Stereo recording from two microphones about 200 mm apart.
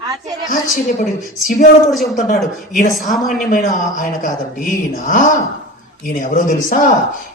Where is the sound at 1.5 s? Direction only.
45° left (ahead or behind).